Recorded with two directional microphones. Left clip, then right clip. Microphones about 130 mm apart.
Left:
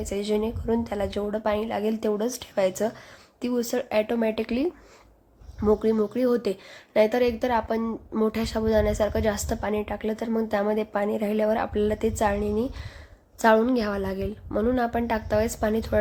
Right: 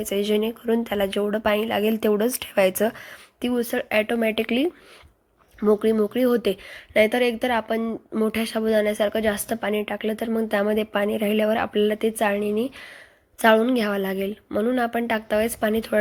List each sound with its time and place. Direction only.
0.0 s a woman's voice: 25° right (ahead or behind)
3.5 s a woman's voice: 10° right (ahead or behind)
7.9 s speech: centre (ahead or behind)
8.3 s a woman's voice: 15° right (ahead or behind)